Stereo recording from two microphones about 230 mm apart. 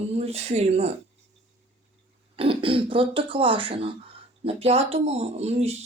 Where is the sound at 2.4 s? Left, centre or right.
Right.